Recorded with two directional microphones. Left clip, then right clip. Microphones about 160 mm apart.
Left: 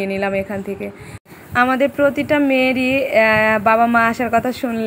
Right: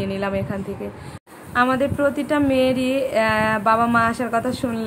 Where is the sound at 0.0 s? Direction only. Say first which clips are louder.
Left 4 dB; 20° left (ahead or behind).